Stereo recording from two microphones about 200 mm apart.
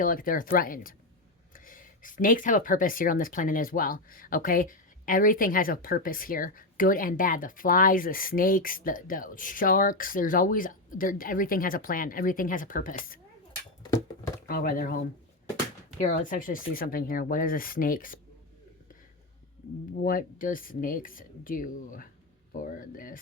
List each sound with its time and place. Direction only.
0.0 s speech: 45° left (ahead or behind)
14.4 s speech: 45° left (ahead or behind)
20.1 s speech: 45° left (ahead or behind)